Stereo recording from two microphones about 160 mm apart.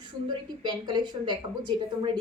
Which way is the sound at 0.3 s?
30° right (ahead or behind).